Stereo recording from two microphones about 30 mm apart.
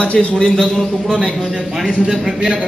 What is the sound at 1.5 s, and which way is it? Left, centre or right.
Speech, centre.